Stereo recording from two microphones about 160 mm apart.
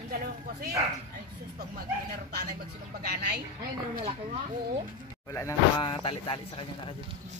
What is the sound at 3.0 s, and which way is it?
Speech, 75° right (ahead or behind).